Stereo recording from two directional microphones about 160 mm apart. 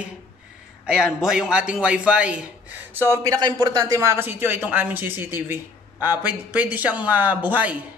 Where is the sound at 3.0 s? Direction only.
20° right (ahead or behind).